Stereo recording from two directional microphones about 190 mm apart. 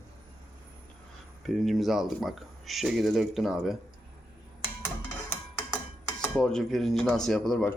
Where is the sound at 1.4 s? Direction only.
Centre (ahead or behind).